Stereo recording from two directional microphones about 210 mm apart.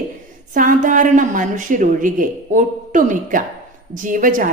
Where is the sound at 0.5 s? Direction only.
40° right (ahead or behind).